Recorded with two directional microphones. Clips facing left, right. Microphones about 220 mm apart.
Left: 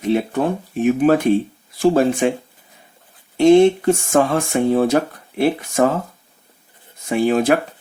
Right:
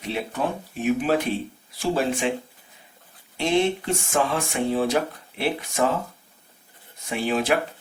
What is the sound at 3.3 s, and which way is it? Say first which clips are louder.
Speech: left 11 dB; 45° left (ahead or behind).